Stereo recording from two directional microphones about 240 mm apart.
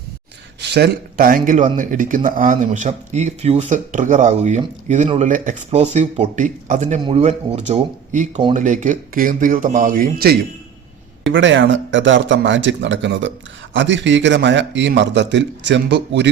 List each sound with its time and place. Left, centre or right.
0.7 s speech: right
11.3 s a man's voice: right